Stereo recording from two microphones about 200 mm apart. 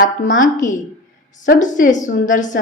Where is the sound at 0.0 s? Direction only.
40° left (ahead or behind).